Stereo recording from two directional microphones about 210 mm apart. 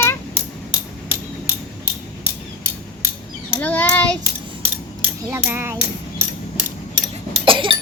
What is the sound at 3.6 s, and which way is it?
Child singing, 10° left (ahead or behind).